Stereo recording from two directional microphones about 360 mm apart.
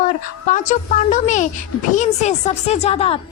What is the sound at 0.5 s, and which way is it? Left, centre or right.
A child's voice, centre.